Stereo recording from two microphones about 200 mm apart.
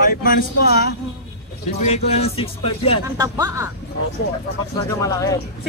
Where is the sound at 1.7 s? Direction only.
35° left (ahead or behind).